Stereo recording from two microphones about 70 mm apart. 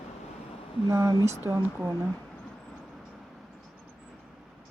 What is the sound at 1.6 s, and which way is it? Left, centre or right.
Speech, right.